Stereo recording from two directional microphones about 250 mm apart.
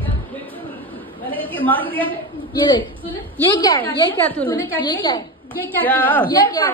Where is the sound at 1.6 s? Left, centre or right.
Centre.